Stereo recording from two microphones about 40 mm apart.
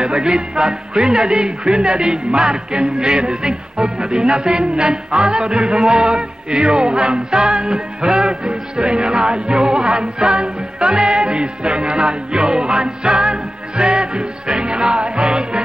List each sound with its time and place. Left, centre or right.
0.0 s speech: right